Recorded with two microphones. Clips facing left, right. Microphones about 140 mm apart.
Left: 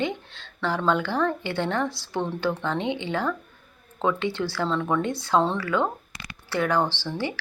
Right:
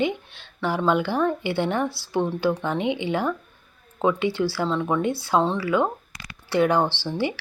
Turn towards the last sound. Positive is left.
turn(degrees=-15)  # may be behind; listen again after turning